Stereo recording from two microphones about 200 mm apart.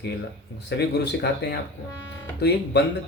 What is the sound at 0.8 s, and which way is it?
Speech, 55° left (ahead or behind).